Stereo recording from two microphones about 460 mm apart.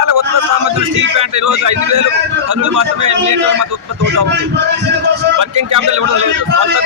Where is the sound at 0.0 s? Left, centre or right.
Right.